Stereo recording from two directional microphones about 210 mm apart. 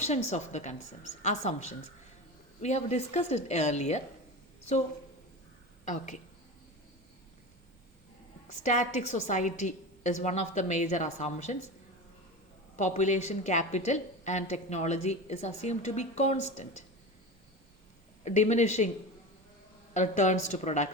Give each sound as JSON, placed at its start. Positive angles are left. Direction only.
{"t": 0.0, "sound": "a woman's voice", "side_deg": 35}
{"t": 5.8, "sound": "a woman's voice", "side_deg": 35}
{"t": 8.4, "sound": "a woman's voice", "side_deg": 35}
{"t": 12.7, "sound": "a woman's voice", "side_deg": 35}
{"t": 18.3, "sound": "a woman's voice", "side_deg": 35}
{"t": 19.9, "sound": "a woman's voice", "side_deg": 35}